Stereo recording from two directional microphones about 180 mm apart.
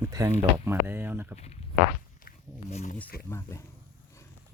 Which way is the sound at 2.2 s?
40° left (ahead or behind).